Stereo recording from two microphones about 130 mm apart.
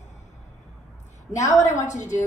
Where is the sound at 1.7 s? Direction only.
65° left (ahead or behind).